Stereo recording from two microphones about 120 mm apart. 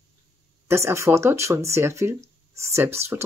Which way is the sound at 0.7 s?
20° right (ahead or behind).